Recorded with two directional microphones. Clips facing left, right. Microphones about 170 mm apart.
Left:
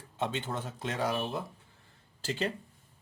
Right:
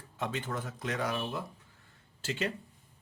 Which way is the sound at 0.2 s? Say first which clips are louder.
Left 2 dB; 25° left (ahead or behind).